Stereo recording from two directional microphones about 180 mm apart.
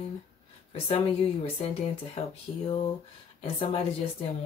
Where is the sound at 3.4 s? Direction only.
30° left (ahead or behind).